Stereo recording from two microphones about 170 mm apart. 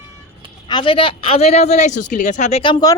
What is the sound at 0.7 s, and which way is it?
Speech, 30° left (ahead or behind).